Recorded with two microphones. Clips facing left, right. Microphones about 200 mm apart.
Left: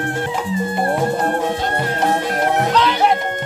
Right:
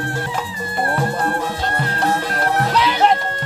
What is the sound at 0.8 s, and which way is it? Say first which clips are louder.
Music: even; 20° left (ahead or behind).